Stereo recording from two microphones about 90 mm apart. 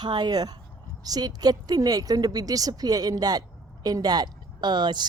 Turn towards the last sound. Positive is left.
turn(degrees=-55)  # may be behind; listen again after turning